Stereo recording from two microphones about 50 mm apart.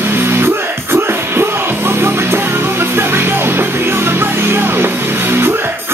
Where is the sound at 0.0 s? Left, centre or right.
Right.